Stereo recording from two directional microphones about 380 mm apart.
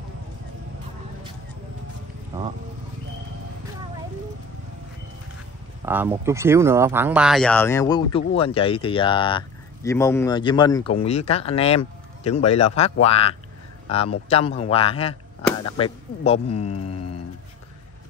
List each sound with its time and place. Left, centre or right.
2.3 s speech: centre
5.9 s a man's voice: centre